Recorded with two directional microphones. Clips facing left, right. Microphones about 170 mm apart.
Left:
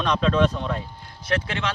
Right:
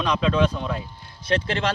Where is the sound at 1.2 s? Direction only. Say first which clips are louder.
Right 3 dB; 30° right (ahead or behind).